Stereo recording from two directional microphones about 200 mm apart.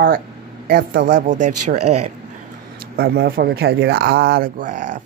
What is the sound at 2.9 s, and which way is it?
Speech, 50° right (ahead or behind).